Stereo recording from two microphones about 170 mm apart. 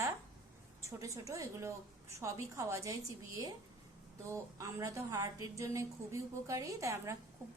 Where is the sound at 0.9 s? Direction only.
20° right (ahead or behind).